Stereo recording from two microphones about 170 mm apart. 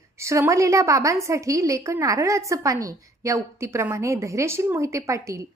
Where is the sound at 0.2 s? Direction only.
15° right (ahead or behind).